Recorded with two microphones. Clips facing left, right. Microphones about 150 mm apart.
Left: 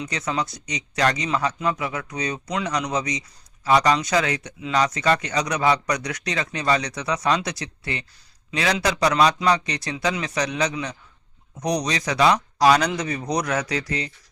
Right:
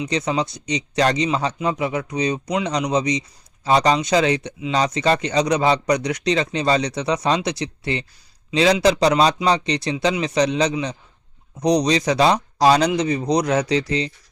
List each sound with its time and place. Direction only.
0.0 s a man's voice: 20° right (ahead or behind)